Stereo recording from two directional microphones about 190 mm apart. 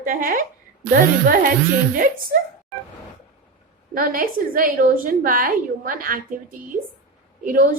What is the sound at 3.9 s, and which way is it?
A woman's voice, 50° right (ahead or behind).